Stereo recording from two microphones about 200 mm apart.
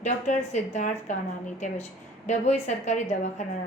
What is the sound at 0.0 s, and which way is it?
A woman's voice, 35° left (ahead or behind).